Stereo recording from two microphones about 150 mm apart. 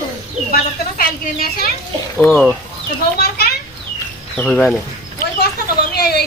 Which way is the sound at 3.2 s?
90° left.